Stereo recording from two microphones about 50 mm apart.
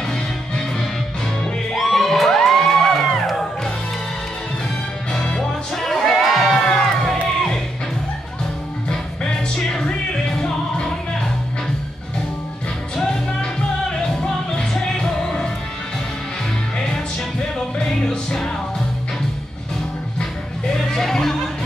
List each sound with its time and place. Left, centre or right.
0.1 s music: centre
1.7 s music: centre
5.1 s music: centre
5.8 s music: centre
8.9 s music: centre
9.8 s music: centre
12.9 s music: centre
17.4 s music: centre
20.2 s music: centre